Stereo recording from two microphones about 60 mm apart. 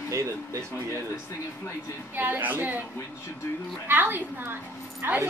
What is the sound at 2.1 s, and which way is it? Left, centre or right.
Speech, right.